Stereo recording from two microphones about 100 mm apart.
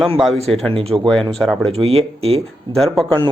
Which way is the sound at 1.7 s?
75° right (ahead or behind).